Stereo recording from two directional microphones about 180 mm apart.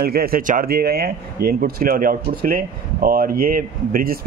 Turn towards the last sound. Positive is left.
turn(degrees=-50)  # may be behind; listen again after turning